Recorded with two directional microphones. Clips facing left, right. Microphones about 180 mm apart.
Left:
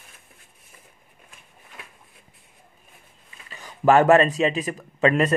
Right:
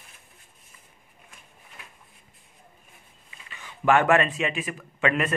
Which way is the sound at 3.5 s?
40° left (ahead or behind).